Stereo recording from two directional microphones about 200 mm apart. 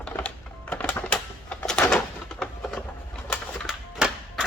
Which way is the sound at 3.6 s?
Centre (ahead or behind).